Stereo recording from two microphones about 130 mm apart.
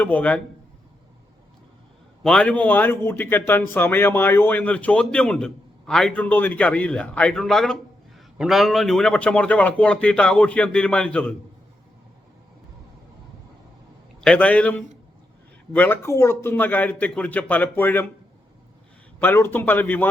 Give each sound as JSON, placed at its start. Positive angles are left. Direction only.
{"t": 0.0, "sound": "a man's voice", "side_deg": 10}
{"t": 2.2, "sound": "a man's voice", "side_deg": 5}
{"t": 14.2, "sound": "a man's voice", "side_deg": 10}
{"t": 19.2, "sound": "a man's voice", "side_deg": 15}